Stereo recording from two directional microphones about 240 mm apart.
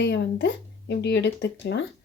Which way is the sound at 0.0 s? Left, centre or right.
Left.